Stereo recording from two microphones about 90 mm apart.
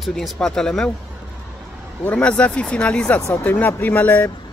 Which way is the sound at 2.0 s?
15° left (ahead or behind).